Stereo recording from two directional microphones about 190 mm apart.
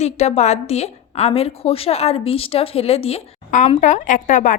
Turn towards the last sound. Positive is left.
turn(degrees=40)  # may be behind; listen again after turning